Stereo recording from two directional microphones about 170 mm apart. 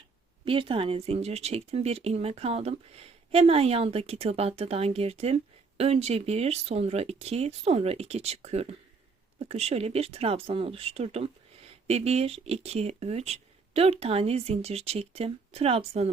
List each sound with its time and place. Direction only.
0.4 s speech: 30° right (ahead or behind)